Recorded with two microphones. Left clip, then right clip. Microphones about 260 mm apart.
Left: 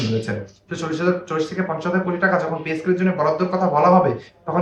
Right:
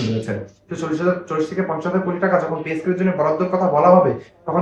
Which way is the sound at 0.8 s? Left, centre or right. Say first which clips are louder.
Right 1 dB; centre.